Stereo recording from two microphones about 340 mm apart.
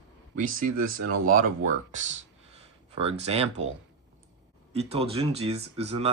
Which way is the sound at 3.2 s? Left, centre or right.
Centre.